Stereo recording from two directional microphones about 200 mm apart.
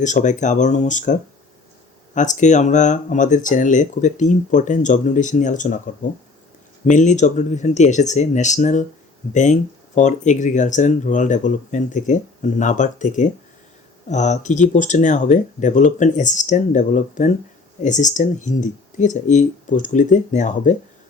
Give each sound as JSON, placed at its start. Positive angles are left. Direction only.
{"t": 0.0, "sound": "speech", "side_deg": 40}
{"t": 6.8, "sound": "speech", "side_deg": 40}